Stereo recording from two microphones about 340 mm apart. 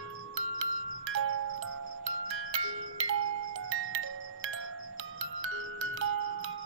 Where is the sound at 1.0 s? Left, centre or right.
Right.